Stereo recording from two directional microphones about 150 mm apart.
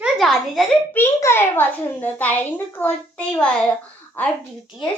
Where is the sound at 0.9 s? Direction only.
15° left (ahead or behind).